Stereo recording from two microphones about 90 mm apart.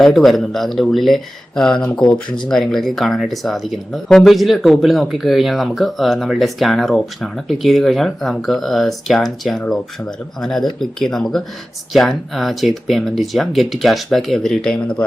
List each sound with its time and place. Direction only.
0.0 s speech: centre (ahead or behind)